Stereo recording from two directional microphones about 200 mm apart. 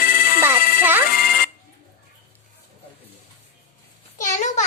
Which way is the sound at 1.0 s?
45° left (ahead or behind).